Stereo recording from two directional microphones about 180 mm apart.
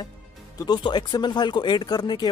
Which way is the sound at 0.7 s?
25° left (ahead or behind).